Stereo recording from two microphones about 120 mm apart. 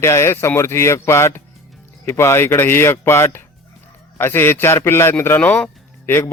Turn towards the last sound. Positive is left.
turn(degrees=20)  # may be behind; listen again after turning